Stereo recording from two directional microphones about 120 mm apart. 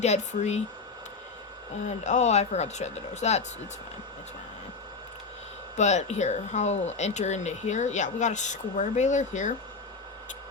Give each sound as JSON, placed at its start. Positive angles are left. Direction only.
{"t": 0.0, "sound": "speech", "side_deg": 70}
{"t": 1.9, "sound": "speech", "side_deg": 75}
{"t": 5.7, "sound": "speech", "side_deg": 75}